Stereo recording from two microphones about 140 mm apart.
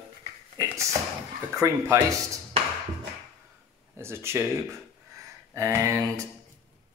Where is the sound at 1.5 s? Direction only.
20° right (ahead or behind).